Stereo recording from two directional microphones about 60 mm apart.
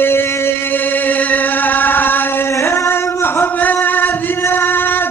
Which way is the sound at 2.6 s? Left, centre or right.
Left.